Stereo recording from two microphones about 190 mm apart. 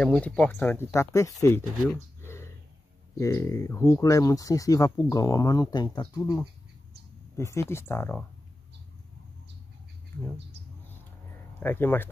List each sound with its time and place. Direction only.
0.0 s speech: 5° left (ahead or behind)
2.2 s a sound: 15° left (ahead or behind)
3.2 s speech: 15° left (ahead or behind)
7.3 s speech: 15° left (ahead or behind)
11.6 s speech: 10° left (ahead or behind)